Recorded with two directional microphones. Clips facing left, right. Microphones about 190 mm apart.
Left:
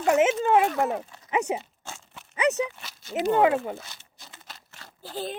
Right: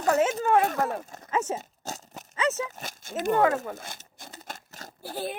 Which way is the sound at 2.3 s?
15° left (ahead or behind).